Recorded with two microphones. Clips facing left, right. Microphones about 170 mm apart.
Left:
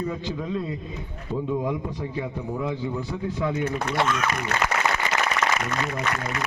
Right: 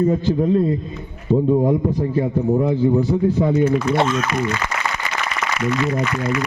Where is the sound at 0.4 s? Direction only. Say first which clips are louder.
Right 11 dB; 45° right (ahead or behind).